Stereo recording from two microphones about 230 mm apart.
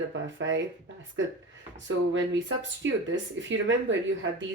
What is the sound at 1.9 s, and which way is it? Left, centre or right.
Speech, right.